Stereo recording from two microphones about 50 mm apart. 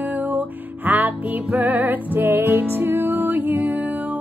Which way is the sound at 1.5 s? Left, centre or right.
Right.